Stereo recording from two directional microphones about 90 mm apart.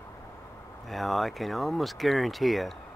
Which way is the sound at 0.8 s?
Centre (ahead or behind).